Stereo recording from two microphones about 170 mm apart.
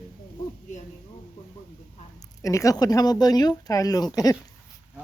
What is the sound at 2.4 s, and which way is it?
Speech, 20° left (ahead or behind).